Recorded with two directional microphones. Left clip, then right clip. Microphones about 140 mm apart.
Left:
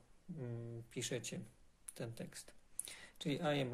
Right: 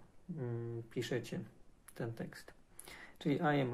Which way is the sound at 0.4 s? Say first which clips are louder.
Right 6 dB; 45° left (ahead or behind).